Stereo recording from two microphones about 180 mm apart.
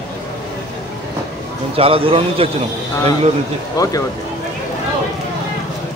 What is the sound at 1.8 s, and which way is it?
Speech, 30° right (ahead or behind).